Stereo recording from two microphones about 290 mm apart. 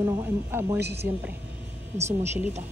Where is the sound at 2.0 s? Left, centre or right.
Centre.